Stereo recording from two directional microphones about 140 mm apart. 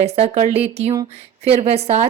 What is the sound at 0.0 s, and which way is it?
Speech, 50° right (ahead or behind).